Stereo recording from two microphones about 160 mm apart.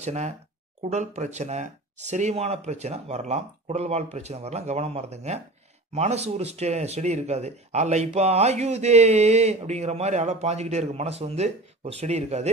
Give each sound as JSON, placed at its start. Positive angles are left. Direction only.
{"t": 0.0, "sound": "speech", "side_deg": -45}